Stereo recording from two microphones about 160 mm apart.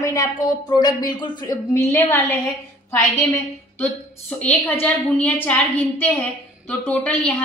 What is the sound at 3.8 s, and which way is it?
A woman's voice, 10° left (ahead or behind).